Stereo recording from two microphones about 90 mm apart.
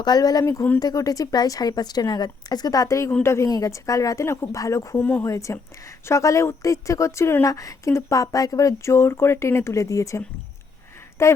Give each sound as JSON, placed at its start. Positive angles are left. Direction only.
{"t": 0.0, "sound": "a woman's voice", "side_deg": 45}
{"t": 4.9, "sound": "speech", "side_deg": 15}
{"t": 5.2, "sound": "speech", "side_deg": 35}